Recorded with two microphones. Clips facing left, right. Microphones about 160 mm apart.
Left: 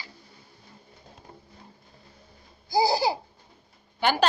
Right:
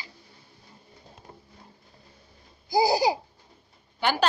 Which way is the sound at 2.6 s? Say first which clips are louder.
Right 1 dB; 15° right (ahead or behind).